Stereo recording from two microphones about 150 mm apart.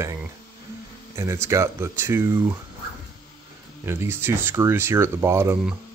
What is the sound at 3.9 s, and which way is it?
Speech, 15° right (ahead or behind).